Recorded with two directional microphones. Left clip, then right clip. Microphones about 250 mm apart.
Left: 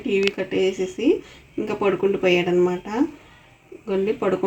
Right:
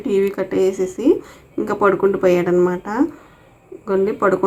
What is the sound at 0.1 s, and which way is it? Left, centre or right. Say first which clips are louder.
Speech: right 3 dB; centre.